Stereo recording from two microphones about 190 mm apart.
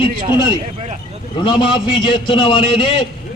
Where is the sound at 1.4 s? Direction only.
25° left (ahead or behind).